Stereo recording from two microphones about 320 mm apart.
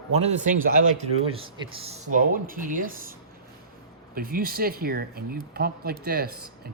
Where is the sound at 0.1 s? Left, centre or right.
Centre.